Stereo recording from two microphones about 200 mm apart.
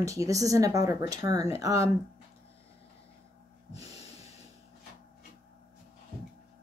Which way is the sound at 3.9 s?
30° left (ahead or behind).